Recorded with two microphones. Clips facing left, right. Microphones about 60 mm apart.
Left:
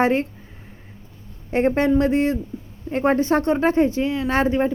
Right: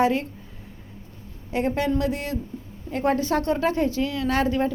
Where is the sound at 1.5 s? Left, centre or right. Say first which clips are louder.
Left 5 dB; left.